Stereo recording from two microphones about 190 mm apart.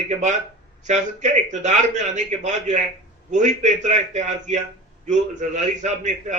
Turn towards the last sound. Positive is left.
turn(degrees=-40)  # may be behind; listen again after turning